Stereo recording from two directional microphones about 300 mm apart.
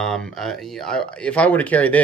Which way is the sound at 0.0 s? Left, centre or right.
Centre.